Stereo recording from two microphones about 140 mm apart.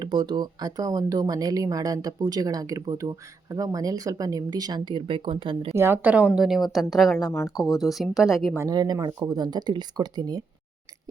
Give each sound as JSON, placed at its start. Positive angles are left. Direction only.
{"t": 0.0, "sound": "speech", "side_deg": -35}
{"t": 5.7, "sound": "a woman's voice", "side_deg": -15}
{"t": 7.2, "sound": "speech", "side_deg": 25}
{"t": 7.8, "sound": "a woman's voice", "side_deg": 0}
{"t": 8.5, "sound": "speech", "side_deg": -25}